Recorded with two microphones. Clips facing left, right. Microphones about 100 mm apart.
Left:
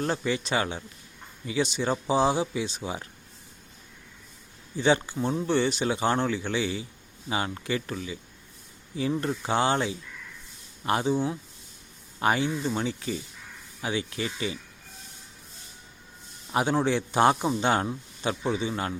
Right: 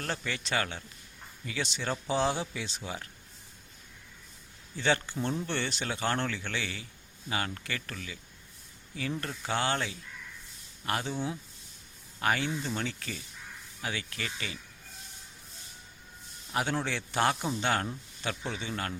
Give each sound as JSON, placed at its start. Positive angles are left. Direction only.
{"t": 0.0, "sound": "speech", "side_deg": 15}
{"t": 4.8, "sound": "a man's voice", "side_deg": 15}
{"t": 16.5, "sound": "a man's voice", "side_deg": 20}